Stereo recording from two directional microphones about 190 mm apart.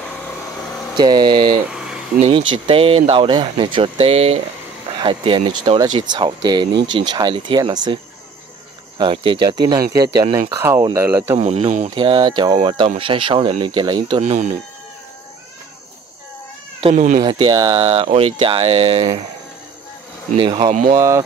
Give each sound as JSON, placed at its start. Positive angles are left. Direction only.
{"t": 0.9, "sound": "speech", "side_deg": -20}
{"t": 1.7, "sound": "a sound", "side_deg": -5}
{"t": 2.1, "sound": "speech", "side_deg": -30}
{"t": 11.3, "sound": "speech", "side_deg": -35}
{"t": 16.8, "sound": "speech", "side_deg": -40}
{"t": 17.2, "sound": "speech", "side_deg": -25}
{"t": 20.3, "sound": "speech", "side_deg": -25}